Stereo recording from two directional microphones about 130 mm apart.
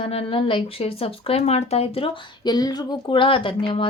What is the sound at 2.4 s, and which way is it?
Speech, 30° left (ahead or behind).